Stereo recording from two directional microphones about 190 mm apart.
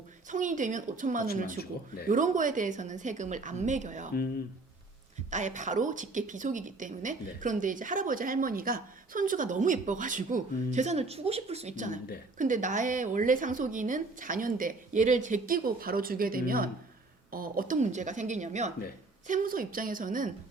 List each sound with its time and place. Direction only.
0.3 s a woman's voice: 40° right (ahead or behind)
5.3 s a woman's voice: 40° right (ahead or behind)